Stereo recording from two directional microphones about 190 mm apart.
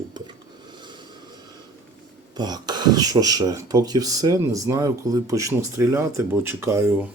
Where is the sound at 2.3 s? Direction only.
20° right (ahead or behind).